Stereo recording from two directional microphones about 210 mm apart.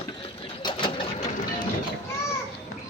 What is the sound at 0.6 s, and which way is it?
Sewing machine, 20° left (ahead or behind).